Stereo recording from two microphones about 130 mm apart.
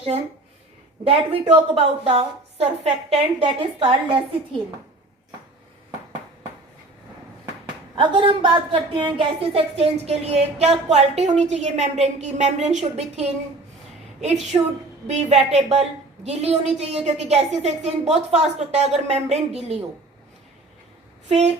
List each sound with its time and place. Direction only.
1.0 s a woman's voice: 50° right (ahead or behind)
3.4 s a woman's voice: 40° right (ahead or behind)
7.9 s a woman's voice: 40° right (ahead or behind)
21.2 s speech: 55° right (ahead or behind)